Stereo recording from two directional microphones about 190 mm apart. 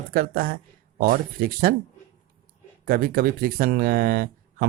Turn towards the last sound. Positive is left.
turn(degrees=-50)  # may be behind; listen again after turning